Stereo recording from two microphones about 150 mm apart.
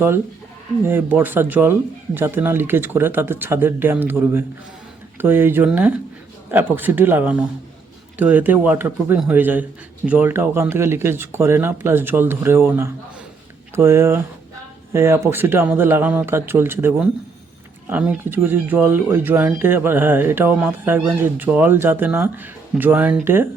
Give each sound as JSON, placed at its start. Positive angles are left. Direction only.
{"t": 0.9, "sound": "speech", "side_deg": -10}